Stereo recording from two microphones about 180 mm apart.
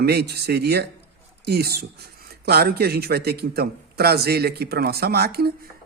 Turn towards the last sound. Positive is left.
turn(degrees=-60)  # may be behind; listen again after turning